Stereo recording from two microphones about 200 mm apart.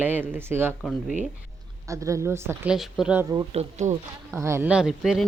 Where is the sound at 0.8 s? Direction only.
Centre (ahead or behind).